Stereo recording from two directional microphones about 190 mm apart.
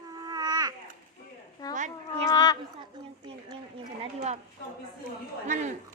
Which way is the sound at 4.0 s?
35° right (ahead or behind).